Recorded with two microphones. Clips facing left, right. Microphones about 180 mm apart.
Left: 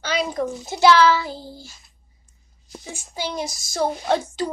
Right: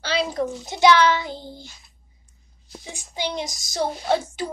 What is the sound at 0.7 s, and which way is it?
Speech, 20° right (ahead or behind).